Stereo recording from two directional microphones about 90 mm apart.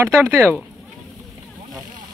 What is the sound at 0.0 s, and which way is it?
Speech, 30° right (ahead or behind).